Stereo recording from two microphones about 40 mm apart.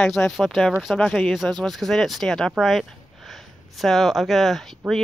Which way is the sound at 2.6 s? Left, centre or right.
Centre.